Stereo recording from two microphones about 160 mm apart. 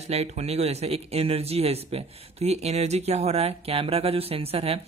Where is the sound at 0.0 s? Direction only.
40° right (ahead or behind).